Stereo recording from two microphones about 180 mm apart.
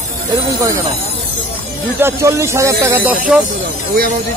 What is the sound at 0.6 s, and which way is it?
Speech, 15° right (ahead or behind).